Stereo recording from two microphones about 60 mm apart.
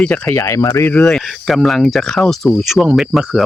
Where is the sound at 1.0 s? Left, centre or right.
Centre.